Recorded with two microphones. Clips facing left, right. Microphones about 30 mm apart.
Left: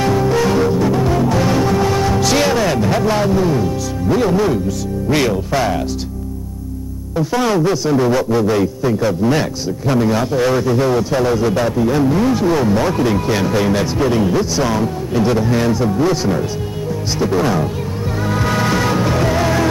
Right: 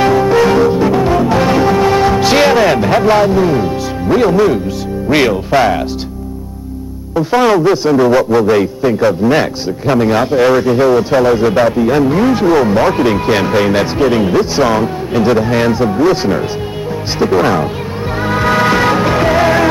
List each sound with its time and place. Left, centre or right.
0.0 s music: right
5.1 s a man's voice: right
7.2 s a man's voice: right
18.2 s music: right